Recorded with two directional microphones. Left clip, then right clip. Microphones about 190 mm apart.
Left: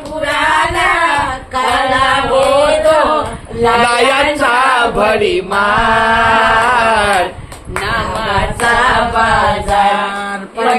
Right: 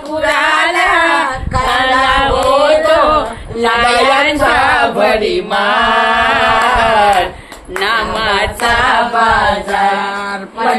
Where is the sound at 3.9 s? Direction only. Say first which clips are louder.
Right 1 dB; 10° left (ahead or behind).